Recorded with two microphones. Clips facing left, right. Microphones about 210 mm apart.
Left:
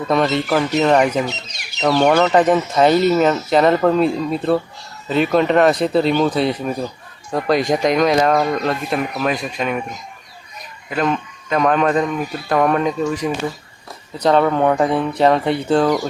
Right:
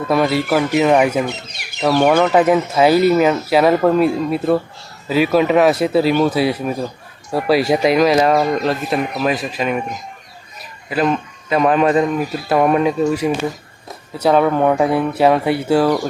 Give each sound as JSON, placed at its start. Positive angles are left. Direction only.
{"t": 0.1, "sound": "speech", "side_deg": -5}
{"t": 1.2, "sound": "bird", "side_deg": -55}
{"t": 1.8, "sound": "speech", "side_deg": -10}